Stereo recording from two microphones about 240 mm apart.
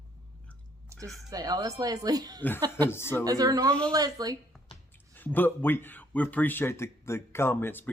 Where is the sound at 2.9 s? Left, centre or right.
Centre.